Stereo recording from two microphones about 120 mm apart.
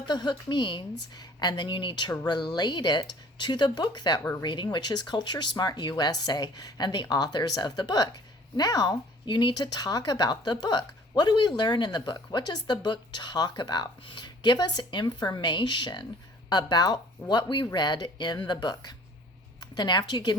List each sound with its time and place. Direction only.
0.1 s speech: 40° left (ahead or behind)
4.2 s speech: 20° left (ahead or behind)
4.4 s a woman's voice: 40° left (ahead or behind)